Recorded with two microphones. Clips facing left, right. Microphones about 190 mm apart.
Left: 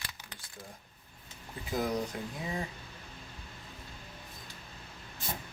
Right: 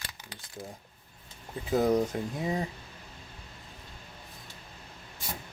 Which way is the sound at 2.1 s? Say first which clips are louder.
Right 6 dB; 30° right (ahead or behind).